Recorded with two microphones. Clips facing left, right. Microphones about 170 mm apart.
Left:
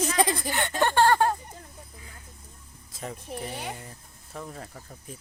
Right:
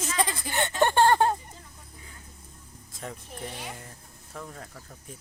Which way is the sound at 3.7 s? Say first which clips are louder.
Left 2 dB; 5° left (ahead or behind).